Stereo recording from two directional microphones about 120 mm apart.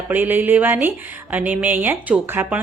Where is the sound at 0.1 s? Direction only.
15° right (ahead or behind).